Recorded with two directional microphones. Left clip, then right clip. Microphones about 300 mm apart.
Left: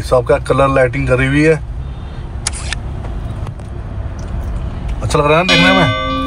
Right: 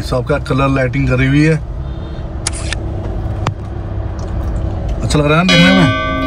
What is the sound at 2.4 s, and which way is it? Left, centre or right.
Vehicle, centre.